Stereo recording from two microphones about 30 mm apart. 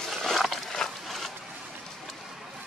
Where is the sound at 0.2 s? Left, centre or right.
Centre.